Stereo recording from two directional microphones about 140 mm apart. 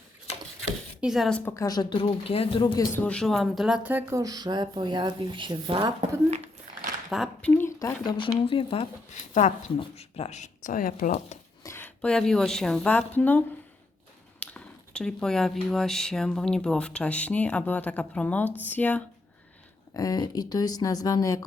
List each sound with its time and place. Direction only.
1.0 s a woman's voice: centre (ahead or behind)
1.5 s speech: 25° left (ahead or behind)
3.0 s a woman's voice: 5° left (ahead or behind)
4.1 s speech: 25° right (ahead or behind)
7.1 s a woman's voice: 5° right (ahead or behind)
7.8 s speech: 20° left (ahead or behind)
8.0 s speech: 35° left (ahead or behind)
9.1 s speech: 60° left (ahead or behind)
9.9 s speech: 50° left (ahead or behind); by 11.3 s 70° left (ahead or behind)
11.6 s a sound: 20° left (ahead or behind)
12.0 s a woman's voice: 5° left (ahead or behind)
19.9 s speech: 25° left (ahead or behind)